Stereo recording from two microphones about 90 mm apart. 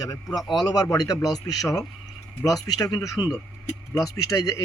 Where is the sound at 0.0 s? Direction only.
45° left (ahead or behind).